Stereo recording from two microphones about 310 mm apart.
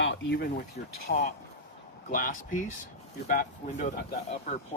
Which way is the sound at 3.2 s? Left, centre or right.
Left.